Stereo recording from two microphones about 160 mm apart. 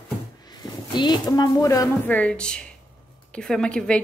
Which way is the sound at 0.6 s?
25° left (ahead or behind).